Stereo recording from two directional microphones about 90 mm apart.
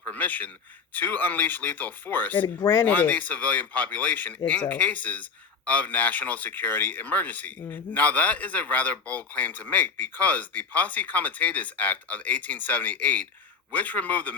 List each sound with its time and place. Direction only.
0.1 s speech: 20° left (ahead or behind)